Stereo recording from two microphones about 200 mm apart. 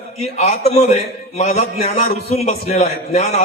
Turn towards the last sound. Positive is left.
turn(degrees=30)  # may be behind; listen again after turning